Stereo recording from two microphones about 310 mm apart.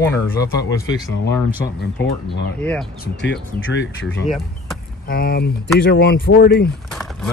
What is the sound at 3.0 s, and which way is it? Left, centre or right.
Speech, left.